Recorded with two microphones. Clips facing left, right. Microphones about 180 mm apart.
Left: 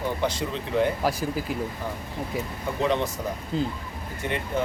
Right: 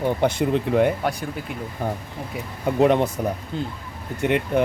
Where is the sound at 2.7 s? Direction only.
60° right (ahead or behind).